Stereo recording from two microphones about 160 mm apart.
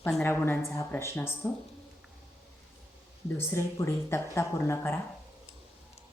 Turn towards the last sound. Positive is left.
turn(degrees=15)  # may be behind; listen again after turning